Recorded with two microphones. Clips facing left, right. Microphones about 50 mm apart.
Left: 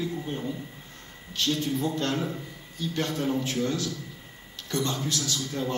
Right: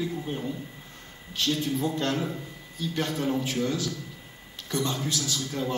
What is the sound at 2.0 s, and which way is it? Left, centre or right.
Speech, centre.